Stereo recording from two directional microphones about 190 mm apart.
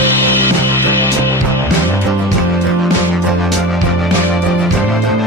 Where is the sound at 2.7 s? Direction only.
Centre (ahead or behind).